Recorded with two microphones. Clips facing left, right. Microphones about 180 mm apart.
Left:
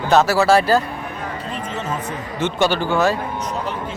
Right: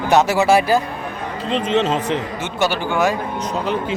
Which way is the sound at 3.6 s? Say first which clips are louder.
Right 5 dB; 90° right.